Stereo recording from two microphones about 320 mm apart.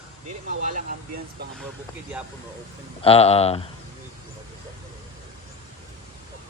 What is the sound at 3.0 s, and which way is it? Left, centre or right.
Speech, centre.